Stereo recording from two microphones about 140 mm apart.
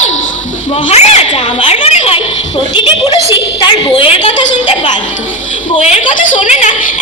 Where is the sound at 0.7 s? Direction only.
45° left (ahead or behind).